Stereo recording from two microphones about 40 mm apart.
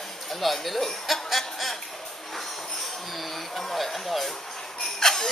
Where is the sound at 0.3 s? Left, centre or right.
Centre.